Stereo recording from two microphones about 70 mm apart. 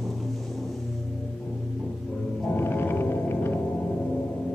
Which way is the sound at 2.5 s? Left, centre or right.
Left.